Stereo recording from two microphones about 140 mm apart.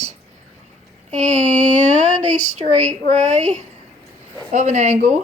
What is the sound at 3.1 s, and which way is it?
Speech, 55° right (ahead or behind).